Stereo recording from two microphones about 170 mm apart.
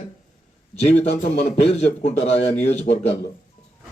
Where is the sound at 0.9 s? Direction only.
40° left (ahead or behind).